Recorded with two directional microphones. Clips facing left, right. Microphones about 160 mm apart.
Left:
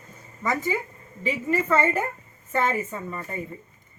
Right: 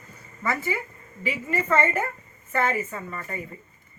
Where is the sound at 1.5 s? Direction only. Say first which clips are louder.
Left 1 dB; 10° left (ahead or behind).